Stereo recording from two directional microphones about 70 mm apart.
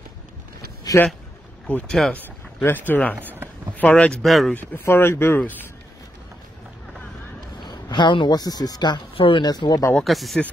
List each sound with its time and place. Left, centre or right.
0.9 s a sound: left
1.9 s speech: centre
2.6 s speech: left
3.2 s speech: right
3.7 s speech: centre
4.2 s speech: centre
4.6 s speech: left
7.6 s speech: left
10.0 s speech: centre